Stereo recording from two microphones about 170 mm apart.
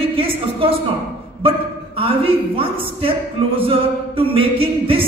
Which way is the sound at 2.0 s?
35° right (ahead or behind).